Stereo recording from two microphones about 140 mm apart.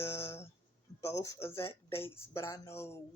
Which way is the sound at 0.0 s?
20° left (ahead or behind).